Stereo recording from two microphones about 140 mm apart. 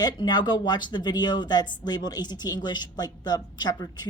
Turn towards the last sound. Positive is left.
turn(degrees=25)  # may be behind; listen again after turning